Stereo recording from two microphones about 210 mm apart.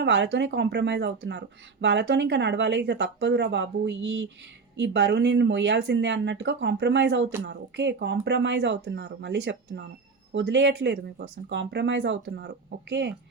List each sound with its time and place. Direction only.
0.0 s speech: 55° right (ahead or behind)